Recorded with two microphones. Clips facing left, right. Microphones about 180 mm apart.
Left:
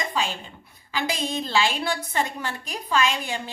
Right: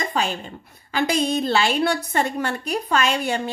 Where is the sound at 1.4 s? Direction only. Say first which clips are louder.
Right 5 dB; 55° right (ahead or behind).